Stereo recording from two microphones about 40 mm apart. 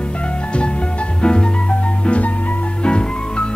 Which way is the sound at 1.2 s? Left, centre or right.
Left.